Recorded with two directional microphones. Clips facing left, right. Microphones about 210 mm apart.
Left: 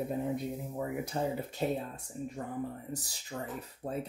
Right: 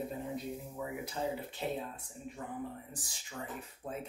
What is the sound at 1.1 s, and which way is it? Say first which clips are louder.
Speech: left 3 dB; 50° left (ahead or behind).